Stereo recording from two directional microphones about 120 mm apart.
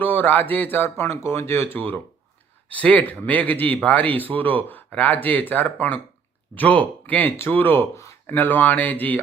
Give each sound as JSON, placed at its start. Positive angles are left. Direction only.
{"t": 0.0, "sound": "speech", "side_deg": 15}